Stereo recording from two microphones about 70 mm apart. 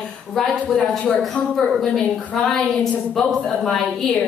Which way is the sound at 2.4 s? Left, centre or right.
Centre.